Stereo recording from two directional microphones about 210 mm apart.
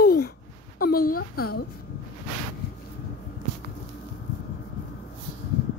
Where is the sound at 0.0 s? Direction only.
45° left (ahead or behind).